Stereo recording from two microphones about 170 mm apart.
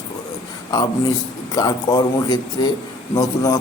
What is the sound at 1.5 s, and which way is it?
A man's voice, 25° left (ahead or behind).